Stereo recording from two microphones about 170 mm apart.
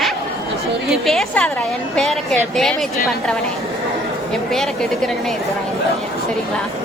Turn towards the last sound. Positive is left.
turn(degrees=0)  # may be behind; listen again after turning